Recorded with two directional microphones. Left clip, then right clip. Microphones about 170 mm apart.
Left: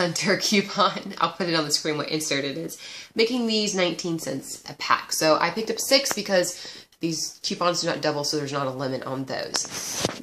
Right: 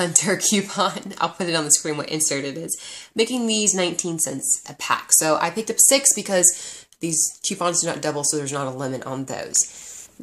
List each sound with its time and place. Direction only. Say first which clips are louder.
0.0 s speech: right 2 dB; 35° right (ahead or behind)